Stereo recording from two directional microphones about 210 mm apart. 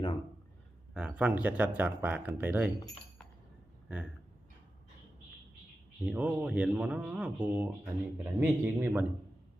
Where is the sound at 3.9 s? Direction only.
5° right (ahead or behind).